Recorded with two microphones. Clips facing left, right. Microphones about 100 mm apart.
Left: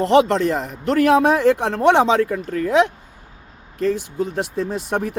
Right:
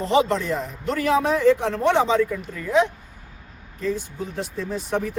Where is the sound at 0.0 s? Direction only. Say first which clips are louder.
Left 5 dB; 70° left (ahead or behind).